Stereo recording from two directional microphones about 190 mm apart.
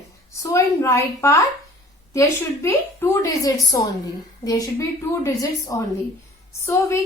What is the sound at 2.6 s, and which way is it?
A woman's voice, 15° left (ahead or behind).